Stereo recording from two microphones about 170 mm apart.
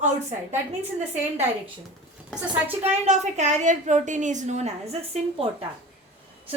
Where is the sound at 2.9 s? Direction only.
40° right (ahead or behind).